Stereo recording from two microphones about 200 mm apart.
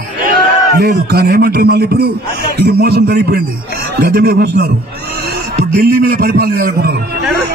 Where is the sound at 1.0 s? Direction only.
50° right (ahead or behind).